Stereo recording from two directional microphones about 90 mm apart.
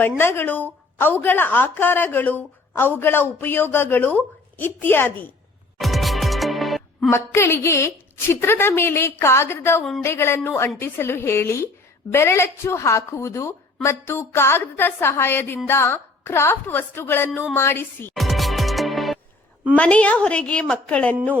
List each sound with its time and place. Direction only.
0.2 s a woman's voice: 25° left (ahead or behind)
5.8 s music: centre (ahead or behind)
7.1 s a woman's voice: 30° left (ahead or behind)
18.1 s music: centre (ahead or behind)
19.7 s a woman's voice: 15° left (ahead or behind)